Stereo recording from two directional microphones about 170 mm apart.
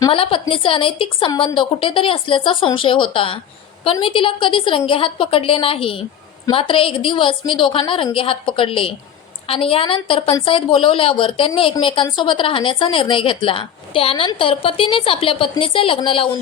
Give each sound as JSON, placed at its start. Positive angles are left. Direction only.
{"t": 0.1, "sound": "a woman's voice", "side_deg": 30}